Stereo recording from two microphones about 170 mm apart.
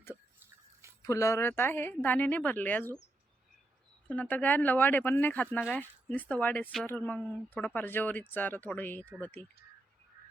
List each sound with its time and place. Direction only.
1.0 s speech: 15° left (ahead or behind)
4.1 s speech: 10° left (ahead or behind)